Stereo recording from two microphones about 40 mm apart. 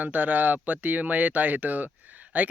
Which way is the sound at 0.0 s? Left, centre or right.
Right.